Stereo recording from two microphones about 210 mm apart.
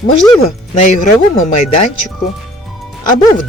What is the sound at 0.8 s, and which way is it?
Speech, 40° left (ahead or behind).